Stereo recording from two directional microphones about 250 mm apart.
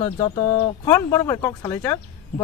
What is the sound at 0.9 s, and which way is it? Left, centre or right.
Speech, centre.